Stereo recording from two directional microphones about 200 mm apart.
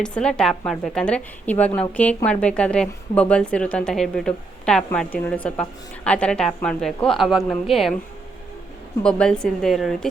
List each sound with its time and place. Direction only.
0.0 s speech: 5° left (ahead or behind)
9.0 s speech: 5° left (ahead or behind)